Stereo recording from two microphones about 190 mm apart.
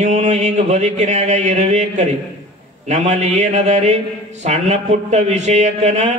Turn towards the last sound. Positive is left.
turn(degrees=-35)  # may be behind; listen again after turning